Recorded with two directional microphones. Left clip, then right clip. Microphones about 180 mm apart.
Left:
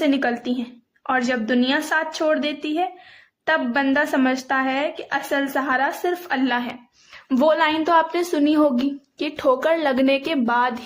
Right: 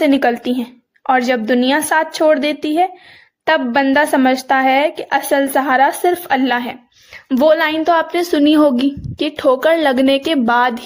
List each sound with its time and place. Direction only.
0.0 s speech: 40° right (ahead or behind)